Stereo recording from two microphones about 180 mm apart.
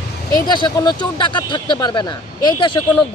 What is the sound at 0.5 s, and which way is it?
Speech, 25° left (ahead or behind).